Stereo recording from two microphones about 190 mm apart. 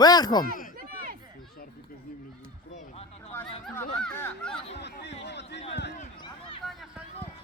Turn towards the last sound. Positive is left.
turn(degrees=25)  # may be behind; listen again after turning